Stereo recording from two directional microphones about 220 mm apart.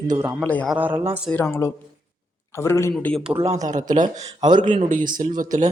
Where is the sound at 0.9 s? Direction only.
25° right (ahead or behind).